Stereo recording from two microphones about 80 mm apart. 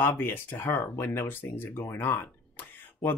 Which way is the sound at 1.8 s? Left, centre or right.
Left.